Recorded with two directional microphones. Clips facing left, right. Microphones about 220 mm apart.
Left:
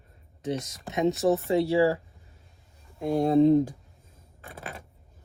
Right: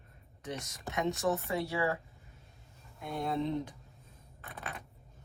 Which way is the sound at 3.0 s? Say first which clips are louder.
Left 14 dB; 35° left (ahead or behind).